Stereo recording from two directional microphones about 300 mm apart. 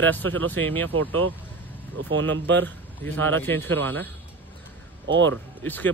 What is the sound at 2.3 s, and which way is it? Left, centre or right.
Speech, right.